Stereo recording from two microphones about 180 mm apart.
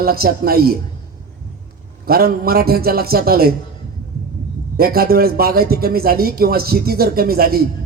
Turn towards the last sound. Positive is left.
turn(degrees=-55)  # may be behind; listen again after turning